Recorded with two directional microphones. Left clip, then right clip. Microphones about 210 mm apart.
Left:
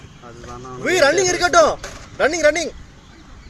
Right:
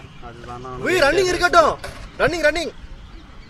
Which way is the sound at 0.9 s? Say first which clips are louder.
Left 1 dB; 20° right (ahead or behind).